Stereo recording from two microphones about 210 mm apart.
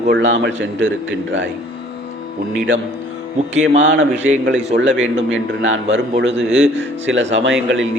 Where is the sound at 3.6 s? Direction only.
65° right (ahead or behind).